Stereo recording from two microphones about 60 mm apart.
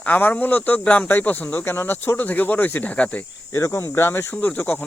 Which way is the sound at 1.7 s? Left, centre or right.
Left.